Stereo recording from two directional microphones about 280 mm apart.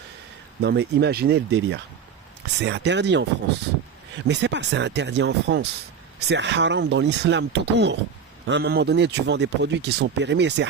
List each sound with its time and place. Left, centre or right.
0.6 s speech: right
4.3 s speech: right